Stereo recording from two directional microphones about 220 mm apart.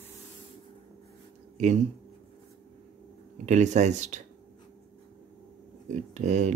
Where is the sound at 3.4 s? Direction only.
30° right (ahead or behind).